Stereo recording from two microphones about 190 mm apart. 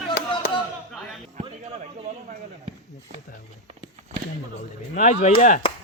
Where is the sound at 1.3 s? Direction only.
40° right (ahead or behind).